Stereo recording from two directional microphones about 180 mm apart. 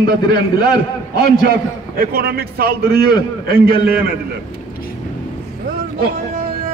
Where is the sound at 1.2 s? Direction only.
60° right (ahead or behind).